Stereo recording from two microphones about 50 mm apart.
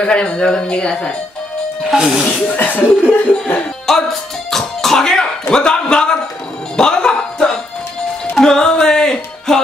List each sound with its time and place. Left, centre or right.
0.0 s speech: centre
1.9 s speech: centre
2.5 s music: left
3.9 s music: centre
5.5 s a man's voice: centre
6.8 s music: centre